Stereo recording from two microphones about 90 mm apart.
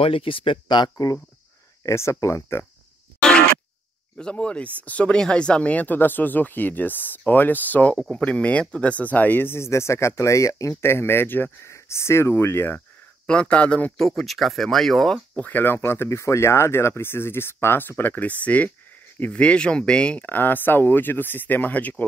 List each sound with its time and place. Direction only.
0.0 s speech: 90° left; by 1.1 s 45° left (ahead or behind)
1.8 s speech: 30° left (ahead or behind)
3.2 s a sound: 10° left (ahead or behind)
4.2 s speech: 10° left (ahead or behind)
13.3 s speech: 10° left (ahead or behind)
13.9 s speech: centre (ahead or behind)
15.3 s speech: 20° left (ahead or behind)